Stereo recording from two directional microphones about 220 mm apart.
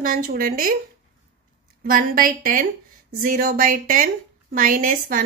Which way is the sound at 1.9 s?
40° right (ahead or behind).